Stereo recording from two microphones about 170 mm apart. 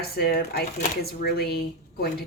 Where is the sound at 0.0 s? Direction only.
65° left (ahead or behind).